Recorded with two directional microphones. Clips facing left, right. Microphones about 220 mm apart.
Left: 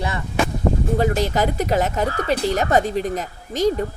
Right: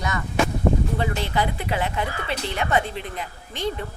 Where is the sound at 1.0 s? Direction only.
40° left (ahead or behind).